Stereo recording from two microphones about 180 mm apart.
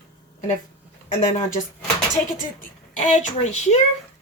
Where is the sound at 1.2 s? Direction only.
40° left (ahead or behind).